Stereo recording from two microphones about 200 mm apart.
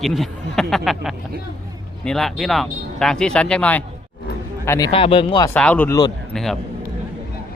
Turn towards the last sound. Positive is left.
turn(degrees=0)  # may be behind; listen again after turning